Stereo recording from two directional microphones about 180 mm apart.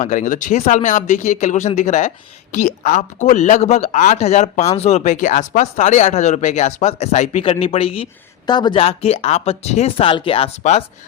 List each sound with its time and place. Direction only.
0.0 s speech: 45° left (ahead or behind)